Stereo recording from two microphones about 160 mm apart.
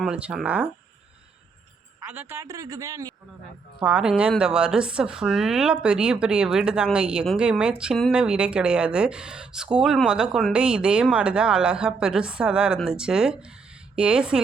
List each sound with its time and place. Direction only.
0.0 s speech: 5° right (ahead or behind)
2.0 s a man's voice: 10° right (ahead or behind)
2.4 s speech: 20° right (ahead or behind)
3.8 s speech: 5° right (ahead or behind)